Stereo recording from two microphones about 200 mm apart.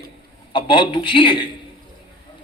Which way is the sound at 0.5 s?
25° left (ahead or behind).